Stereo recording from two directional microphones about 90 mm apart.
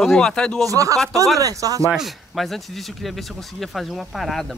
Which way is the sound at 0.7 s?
40° right (ahead or behind).